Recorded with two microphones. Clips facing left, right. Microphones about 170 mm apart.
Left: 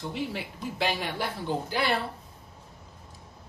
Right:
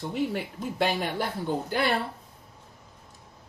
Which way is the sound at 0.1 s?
50° right (ahead or behind).